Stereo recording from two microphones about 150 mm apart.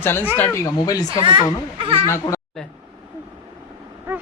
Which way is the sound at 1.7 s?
35° right (ahead or behind).